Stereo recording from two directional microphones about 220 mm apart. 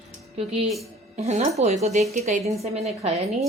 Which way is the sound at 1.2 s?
30° right (ahead or behind).